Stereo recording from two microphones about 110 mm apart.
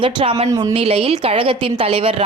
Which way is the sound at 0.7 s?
60° right (ahead or behind).